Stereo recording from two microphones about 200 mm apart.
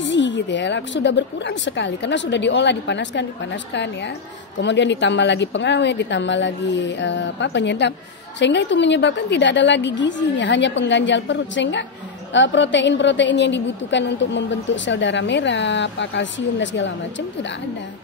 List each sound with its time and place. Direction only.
0.0 s a woman's voice: 65° left (ahead or behind)